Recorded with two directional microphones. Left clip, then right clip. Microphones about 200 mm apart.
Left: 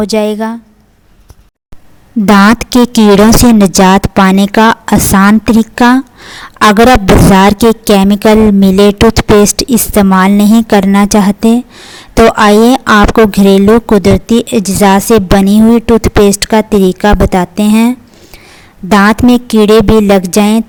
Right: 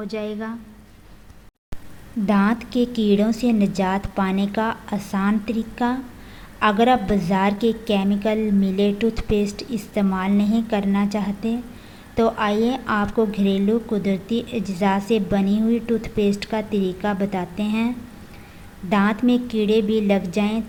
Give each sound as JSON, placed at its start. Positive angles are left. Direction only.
{"t": 0.0, "sound": "speech", "side_deg": 50}
{"t": 2.2, "sound": "speech", "side_deg": 50}